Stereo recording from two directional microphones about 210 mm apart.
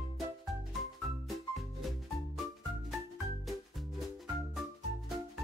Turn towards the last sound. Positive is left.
turn(degrees=0)  # may be behind; listen again after turning